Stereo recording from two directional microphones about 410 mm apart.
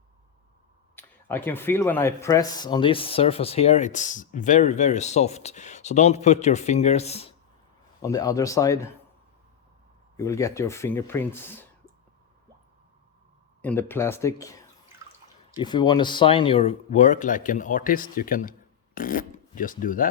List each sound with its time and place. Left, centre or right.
0.9 s speech: centre
10.2 s speech: centre
13.6 s speech: centre
15.5 s speech: centre